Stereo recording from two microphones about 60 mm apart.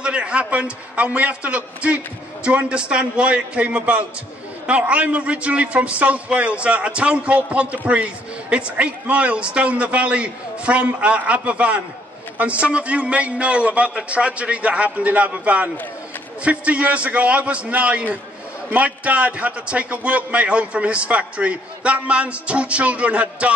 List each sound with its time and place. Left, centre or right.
0.0 s a man's voice: centre